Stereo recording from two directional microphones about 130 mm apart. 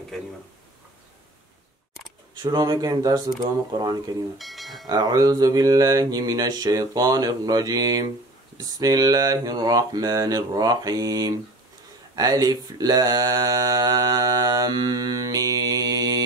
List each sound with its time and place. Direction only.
2.4 s speech: 30° right (ahead or behind)
4.4 s speech: centre (ahead or behind)
4.8 s mantra: 30° right (ahead or behind)